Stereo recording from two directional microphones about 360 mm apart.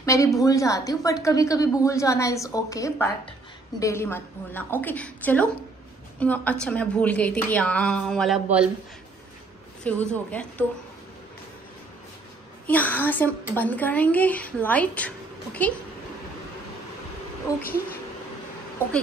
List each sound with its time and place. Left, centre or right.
0.0 s a woman's voice: centre
9.8 s a woman's voice: centre
12.6 s a woman's voice: centre
17.6 s a woman's voice: left